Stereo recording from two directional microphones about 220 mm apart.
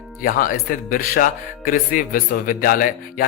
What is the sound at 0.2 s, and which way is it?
Speech, 40° left (ahead or behind).